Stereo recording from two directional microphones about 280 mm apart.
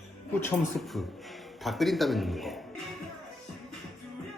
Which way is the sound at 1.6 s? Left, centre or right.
Centre.